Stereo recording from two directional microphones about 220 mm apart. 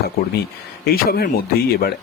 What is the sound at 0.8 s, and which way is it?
Speech, 45° left (ahead or behind).